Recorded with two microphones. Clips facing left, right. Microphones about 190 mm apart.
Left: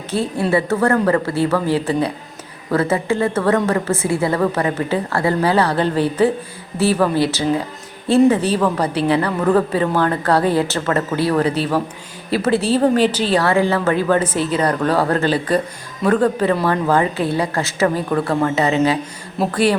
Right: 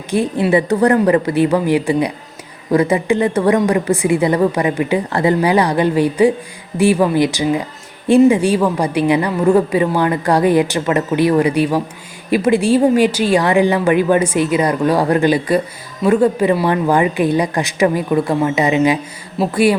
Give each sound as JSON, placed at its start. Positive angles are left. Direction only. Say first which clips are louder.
{"t": 0.1, "sound": "a woman's voice", "louder": "right 4 dB", "side_deg": -15}